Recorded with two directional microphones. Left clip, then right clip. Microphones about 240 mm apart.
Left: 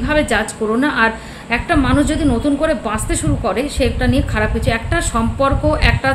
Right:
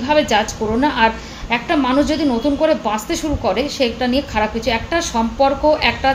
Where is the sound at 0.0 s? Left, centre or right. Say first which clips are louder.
Right 1 dB; centre.